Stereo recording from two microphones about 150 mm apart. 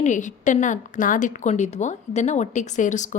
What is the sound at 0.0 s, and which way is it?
A woman's voice, 55° left (ahead or behind).